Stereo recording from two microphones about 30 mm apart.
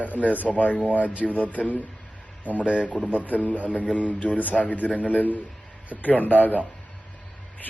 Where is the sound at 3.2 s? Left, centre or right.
Left.